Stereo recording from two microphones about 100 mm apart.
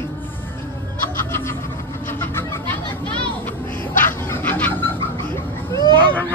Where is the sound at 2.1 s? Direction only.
25° left (ahead or behind).